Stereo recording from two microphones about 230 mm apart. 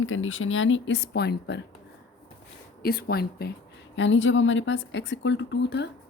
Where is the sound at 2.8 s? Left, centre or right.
Left.